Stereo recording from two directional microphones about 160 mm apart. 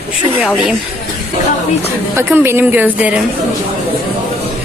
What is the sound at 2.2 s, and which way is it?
A woman's voice, 15° right (ahead or behind).